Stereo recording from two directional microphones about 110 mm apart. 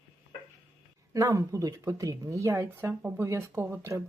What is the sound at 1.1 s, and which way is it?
Speech, 30° right (ahead or behind).